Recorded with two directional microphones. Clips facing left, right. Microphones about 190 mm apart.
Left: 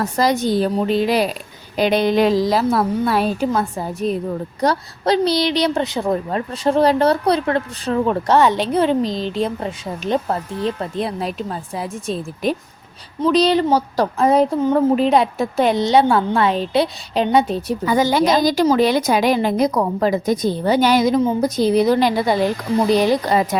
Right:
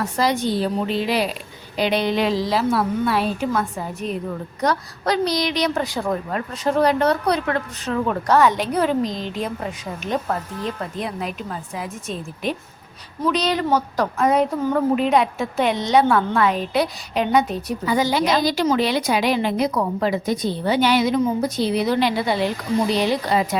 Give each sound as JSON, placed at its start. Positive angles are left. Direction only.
{"t": 0.0, "sound": "a woman's voice", "side_deg": 40}
{"t": 17.8, "sound": "a woman's voice", "side_deg": 45}